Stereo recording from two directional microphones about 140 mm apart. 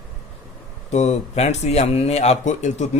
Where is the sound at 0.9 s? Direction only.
55° left (ahead or behind).